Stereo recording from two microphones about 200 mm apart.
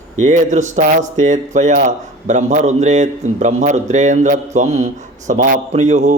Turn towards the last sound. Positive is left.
turn(degrees=-35)  # may be behind; listen again after turning